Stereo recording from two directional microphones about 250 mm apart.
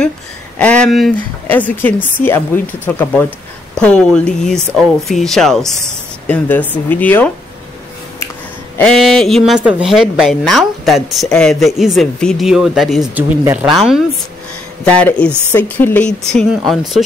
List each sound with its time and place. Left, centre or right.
0.6 s speech: centre
8.7 s speech: centre